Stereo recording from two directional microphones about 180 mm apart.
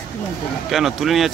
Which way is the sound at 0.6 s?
Centre (ahead or behind).